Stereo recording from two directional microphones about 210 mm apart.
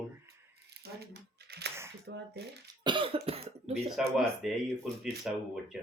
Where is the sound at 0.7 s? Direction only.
50° right (ahead or behind).